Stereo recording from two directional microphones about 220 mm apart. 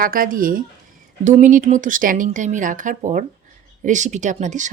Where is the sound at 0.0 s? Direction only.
40° right (ahead or behind).